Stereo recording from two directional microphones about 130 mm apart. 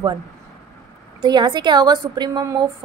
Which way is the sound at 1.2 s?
35° right (ahead or behind).